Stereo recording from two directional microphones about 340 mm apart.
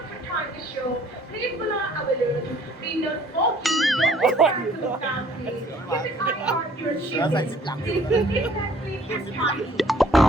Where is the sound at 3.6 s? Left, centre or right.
Centre.